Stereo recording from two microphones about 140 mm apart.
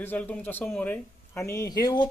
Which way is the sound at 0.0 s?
10° left (ahead or behind).